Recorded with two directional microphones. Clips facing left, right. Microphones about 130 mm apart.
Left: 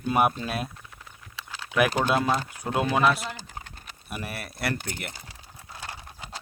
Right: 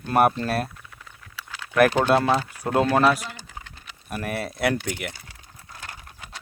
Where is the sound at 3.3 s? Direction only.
45° left (ahead or behind).